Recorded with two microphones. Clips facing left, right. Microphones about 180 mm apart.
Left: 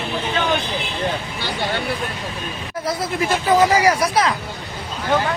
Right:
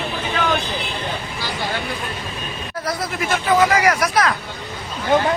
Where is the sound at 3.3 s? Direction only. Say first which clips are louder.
Left 1 dB; 30° left (ahead or behind).